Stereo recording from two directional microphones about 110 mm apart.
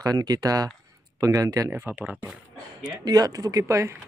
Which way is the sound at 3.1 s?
35° right (ahead or behind).